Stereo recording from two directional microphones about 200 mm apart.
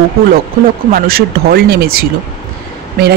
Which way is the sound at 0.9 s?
50° right (ahead or behind).